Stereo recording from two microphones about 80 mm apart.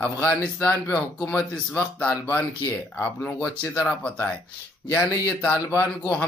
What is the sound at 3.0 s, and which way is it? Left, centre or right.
Speech, left.